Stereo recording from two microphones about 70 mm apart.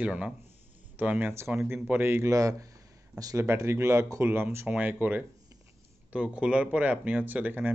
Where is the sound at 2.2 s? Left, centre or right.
Right.